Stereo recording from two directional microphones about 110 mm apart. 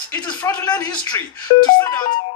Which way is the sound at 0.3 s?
15° left (ahead or behind).